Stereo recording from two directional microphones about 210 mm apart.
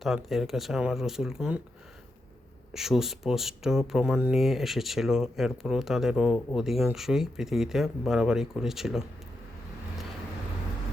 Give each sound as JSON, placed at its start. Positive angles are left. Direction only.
{"t": 0.0, "sound": "speech", "side_deg": 0}
{"t": 2.7, "sound": "speech", "side_deg": 0}